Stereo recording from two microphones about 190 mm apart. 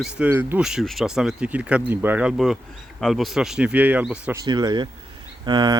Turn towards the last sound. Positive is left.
turn(degrees=-25)  # may be behind; listen again after turning